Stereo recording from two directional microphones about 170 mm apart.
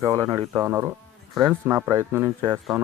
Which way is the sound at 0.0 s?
20° right (ahead or behind).